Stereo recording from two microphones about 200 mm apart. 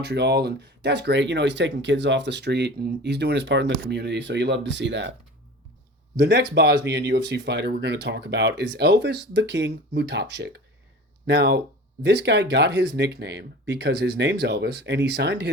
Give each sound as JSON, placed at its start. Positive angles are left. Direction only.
{"t": 0.0, "sound": "speech", "side_deg": -55}
{"t": 6.1, "sound": "speech", "side_deg": -55}